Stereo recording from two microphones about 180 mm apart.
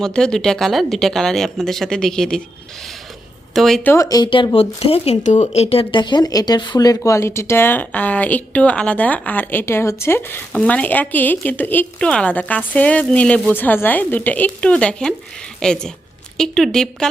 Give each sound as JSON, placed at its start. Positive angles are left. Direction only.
{"t": 0.0, "sound": "speech", "side_deg": 5}
{"t": 3.5, "sound": "speech", "side_deg": 0}
{"t": 3.9, "sound": "speech", "side_deg": 20}